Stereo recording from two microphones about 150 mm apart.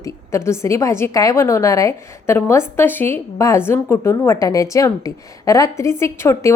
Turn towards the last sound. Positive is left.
turn(degrees=20)  # may be behind; listen again after turning